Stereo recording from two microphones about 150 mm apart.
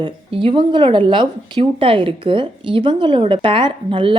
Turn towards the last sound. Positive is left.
turn(degrees=-35)  # may be behind; listen again after turning